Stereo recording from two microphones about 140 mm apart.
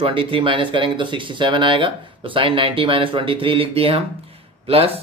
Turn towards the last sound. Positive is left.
turn(degrees=-45)  # may be behind; listen again after turning